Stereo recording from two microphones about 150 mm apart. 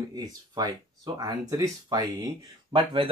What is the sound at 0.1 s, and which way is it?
Speech, 25° right (ahead or behind).